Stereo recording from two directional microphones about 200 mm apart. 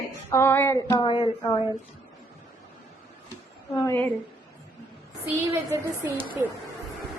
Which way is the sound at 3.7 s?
15° left (ahead or behind).